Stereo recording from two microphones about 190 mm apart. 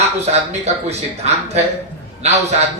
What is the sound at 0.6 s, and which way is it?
A man's voice, 35° right (ahead or behind).